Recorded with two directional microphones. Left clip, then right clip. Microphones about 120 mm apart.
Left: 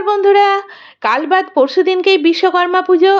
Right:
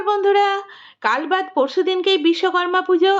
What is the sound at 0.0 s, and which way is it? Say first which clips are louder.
Speech: left 6 dB; 15° left (ahead or behind).